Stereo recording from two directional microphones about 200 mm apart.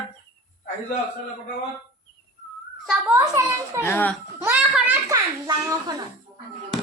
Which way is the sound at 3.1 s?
15° right (ahead or behind).